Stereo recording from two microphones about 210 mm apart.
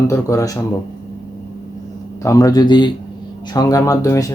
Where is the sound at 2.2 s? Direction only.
15° left (ahead or behind).